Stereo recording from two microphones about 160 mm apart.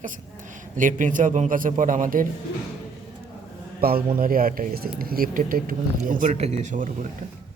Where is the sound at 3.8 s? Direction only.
70° right (ahead or behind).